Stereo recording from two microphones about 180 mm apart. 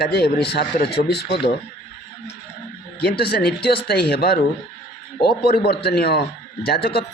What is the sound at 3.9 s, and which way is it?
Speech, 60° left (ahead or behind).